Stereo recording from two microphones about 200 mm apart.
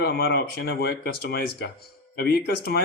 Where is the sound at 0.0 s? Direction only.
55° left (ahead or behind).